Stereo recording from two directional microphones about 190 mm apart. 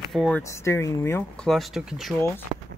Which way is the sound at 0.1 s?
Centre (ahead or behind).